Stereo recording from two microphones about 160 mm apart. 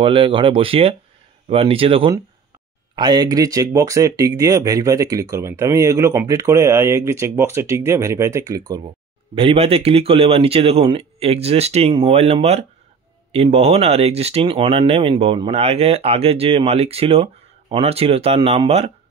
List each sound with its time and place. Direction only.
0.0 s speech: 35° right (ahead or behind)